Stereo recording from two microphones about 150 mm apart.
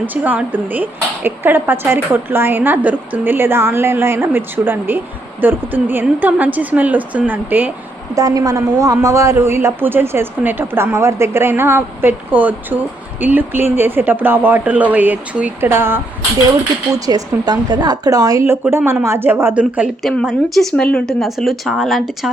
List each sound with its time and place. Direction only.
0.0 s speech: 10° right (ahead or behind)
8.1 s speech: 25° right (ahead or behind)
16.9 s speech: 25° right (ahead or behind); by 22.3 s centre (ahead or behind)